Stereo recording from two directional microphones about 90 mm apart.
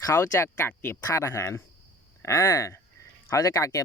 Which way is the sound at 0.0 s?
35° left (ahead or behind).